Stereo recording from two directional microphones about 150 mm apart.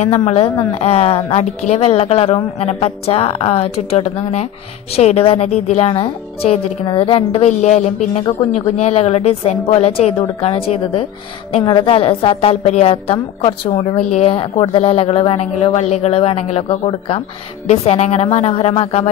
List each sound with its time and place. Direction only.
0.0 s a woman's voice: 45° left (ahead or behind)
8.7 s a woman's voice: 45° left (ahead or behind)